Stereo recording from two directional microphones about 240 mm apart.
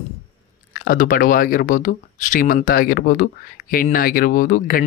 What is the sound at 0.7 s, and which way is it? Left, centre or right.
Speech, left.